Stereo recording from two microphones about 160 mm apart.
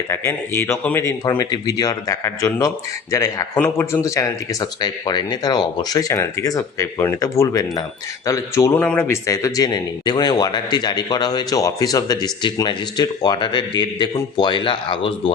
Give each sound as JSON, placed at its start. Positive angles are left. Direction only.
{"t": 0.1, "sound": "speech", "side_deg": 15}